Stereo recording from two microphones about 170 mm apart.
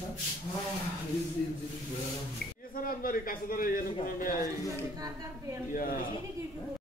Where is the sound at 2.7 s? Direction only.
55° left (ahead or behind).